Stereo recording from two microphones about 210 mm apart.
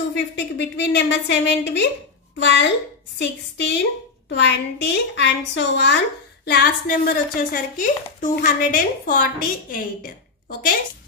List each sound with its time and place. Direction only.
0.1 s a woman's voice: 55° left (ahead or behind)